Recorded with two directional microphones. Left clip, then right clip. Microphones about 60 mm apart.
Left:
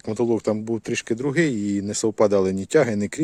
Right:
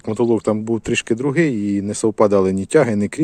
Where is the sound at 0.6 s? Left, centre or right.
Centre.